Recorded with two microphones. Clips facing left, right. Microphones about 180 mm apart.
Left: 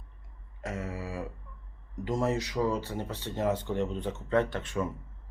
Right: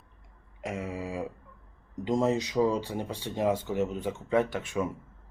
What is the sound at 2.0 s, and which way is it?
Speech, 20° right (ahead or behind).